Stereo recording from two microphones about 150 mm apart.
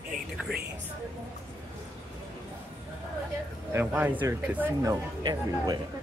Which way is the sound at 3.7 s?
10° right (ahead or behind).